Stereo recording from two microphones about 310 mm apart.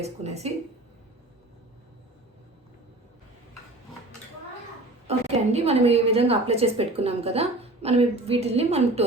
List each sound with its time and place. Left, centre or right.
0.0 s a woman's voice: right
5.0 s a woman's voice: right